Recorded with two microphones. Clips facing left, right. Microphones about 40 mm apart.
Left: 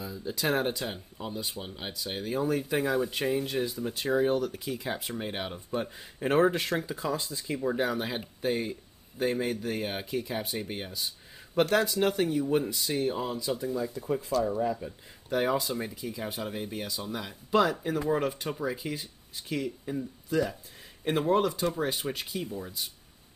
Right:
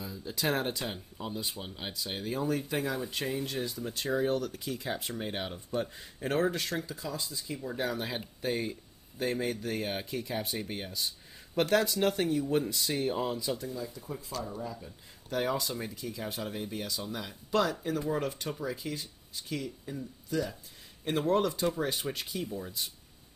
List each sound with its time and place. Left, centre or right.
0.0 s speech: centre; by 7.0 s left
7.0 s speech: left
7.7 s speech: centre
13.9 s speech: left
15.2 s speech: centre